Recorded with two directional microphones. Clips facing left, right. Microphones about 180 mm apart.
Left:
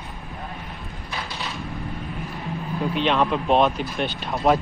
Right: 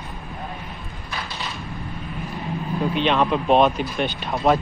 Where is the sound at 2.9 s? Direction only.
Centre (ahead or behind).